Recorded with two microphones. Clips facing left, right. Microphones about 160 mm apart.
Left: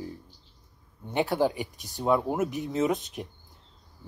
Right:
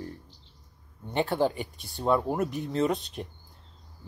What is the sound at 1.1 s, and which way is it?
Speech, 15° left (ahead or behind).